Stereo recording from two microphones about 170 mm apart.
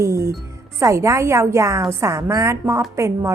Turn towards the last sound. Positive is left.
turn(degrees=-15)  # may be behind; listen again after turning